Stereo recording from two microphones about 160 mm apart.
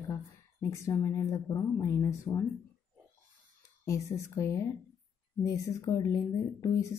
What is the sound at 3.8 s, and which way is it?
Speech, 20° left (ahead or behind).